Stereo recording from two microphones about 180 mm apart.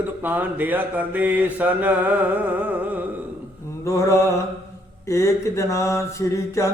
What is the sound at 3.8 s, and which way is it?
Mantra, 15° left (ahead or behind).